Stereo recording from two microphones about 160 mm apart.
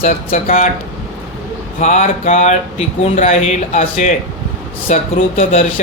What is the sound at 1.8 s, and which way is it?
Speech, 45° left (ahead or behind).